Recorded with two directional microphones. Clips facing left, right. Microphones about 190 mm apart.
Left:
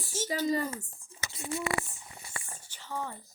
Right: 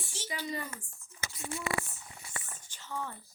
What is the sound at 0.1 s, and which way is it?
Speech, 45° left (ahead or behind).